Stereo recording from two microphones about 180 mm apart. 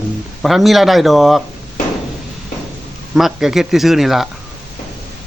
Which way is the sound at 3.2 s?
Centre (ahead or behind).